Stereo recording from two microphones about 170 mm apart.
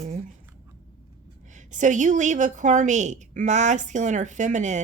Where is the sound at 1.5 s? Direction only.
45° right (ahead or behind).